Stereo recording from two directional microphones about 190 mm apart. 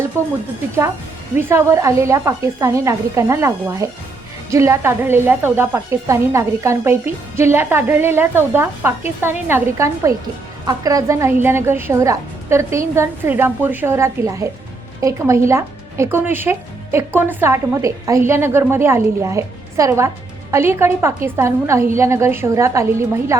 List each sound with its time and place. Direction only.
0.1 s a woman's voice: 15° right (ahead or behind)
1.4 s a woman's voice: 15° right (ahead or behind)